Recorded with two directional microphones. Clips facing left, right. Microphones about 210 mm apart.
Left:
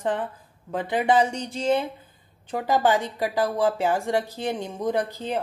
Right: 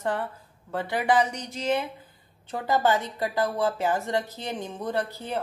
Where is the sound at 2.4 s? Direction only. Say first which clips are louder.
Left 2 dB; 15° left (ahead or behind).